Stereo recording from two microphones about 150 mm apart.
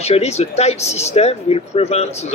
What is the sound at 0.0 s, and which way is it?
Speech, 45° left (ahead or behind).